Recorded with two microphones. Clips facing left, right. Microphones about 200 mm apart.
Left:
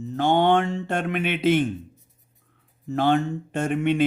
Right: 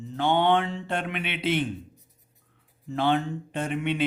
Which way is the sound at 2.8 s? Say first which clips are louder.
Left 4 dB; 45° left (ahead or behind).